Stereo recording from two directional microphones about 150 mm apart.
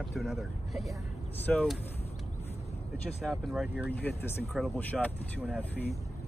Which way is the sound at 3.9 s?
10° left (ahead or behind).